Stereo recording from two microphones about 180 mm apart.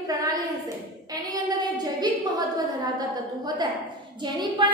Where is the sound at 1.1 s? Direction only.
20° right (ahead or behind).